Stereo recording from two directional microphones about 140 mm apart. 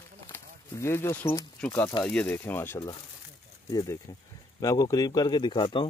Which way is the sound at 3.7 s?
25° left (ahead or behind).